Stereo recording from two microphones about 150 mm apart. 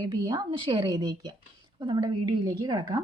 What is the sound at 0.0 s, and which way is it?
A woman's voice, 25° right (ahead or behind).